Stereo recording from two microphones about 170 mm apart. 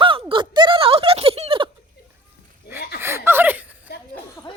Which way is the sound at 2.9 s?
15° right (ahead or behind).